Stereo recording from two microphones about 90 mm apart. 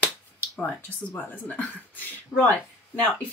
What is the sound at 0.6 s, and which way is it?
Speech, 15° left (ahead or behind).